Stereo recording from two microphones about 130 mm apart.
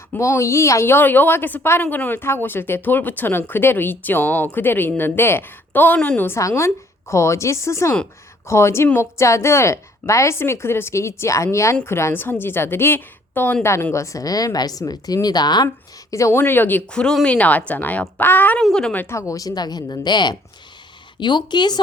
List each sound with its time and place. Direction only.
0.1 s a woman's voice: 20° left (ahead or behind)
16.1 s a woman's voice: 25° left (ahead or behind); by 19.0 s 5° left (ahead or behind)
19.0 s speech: 20° left (ahead or behind)